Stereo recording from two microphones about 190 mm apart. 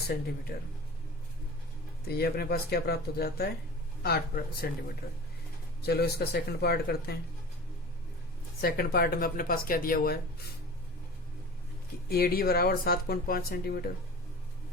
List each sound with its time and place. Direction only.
2.0 s speech: 55° left (ahead or behind)
5.8 s speech: 55° left (ahead or behind)
8.6 s speech: 50° left (ahead or behind)
12.0 s speech: 55° left (ahead or behind)